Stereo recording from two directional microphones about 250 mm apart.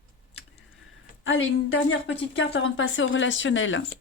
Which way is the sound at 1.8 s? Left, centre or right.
Left.